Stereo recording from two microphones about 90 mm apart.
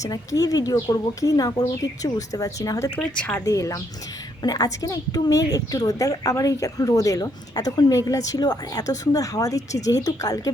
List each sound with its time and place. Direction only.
0.1 s a woman's voice: 40° left (ahead or behind)
3.0 s a woman's voice: 15° left (ahead or behind)
3.4 s a woman's voice: 35° left (ahead or behind)